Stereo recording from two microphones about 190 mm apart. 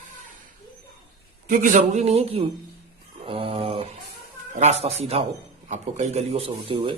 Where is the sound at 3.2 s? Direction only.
30° right (ahead or behind).